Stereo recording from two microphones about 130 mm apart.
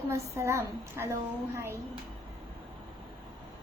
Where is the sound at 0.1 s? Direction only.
20° right (ahead or behind).